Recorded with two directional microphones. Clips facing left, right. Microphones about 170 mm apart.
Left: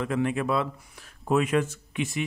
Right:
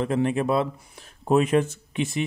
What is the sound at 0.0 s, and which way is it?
Speech, 30° right (ahead or behind).